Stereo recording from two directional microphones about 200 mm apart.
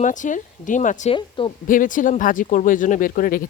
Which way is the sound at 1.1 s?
25° left (ahead or behind).